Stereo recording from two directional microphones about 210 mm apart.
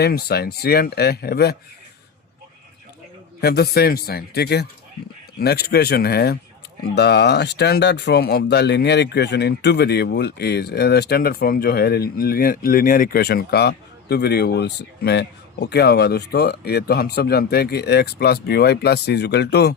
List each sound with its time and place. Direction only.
0.0 s speech: 50° left (ahead or behind)
3.4 s speech: 50° left (ahead or behind)